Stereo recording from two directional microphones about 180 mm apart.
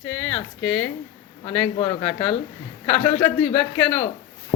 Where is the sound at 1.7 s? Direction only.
35° left (ahead or behind).